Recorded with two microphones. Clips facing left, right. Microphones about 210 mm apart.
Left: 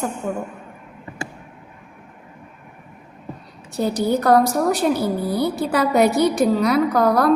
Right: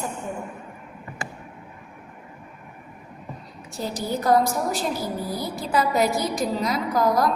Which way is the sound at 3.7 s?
65° left (ahead or behind).